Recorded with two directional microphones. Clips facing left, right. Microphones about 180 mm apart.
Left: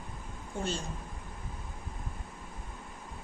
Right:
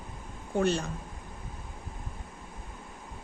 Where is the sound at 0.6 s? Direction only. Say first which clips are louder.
Right 8 dB; 65° right (ahead or behind).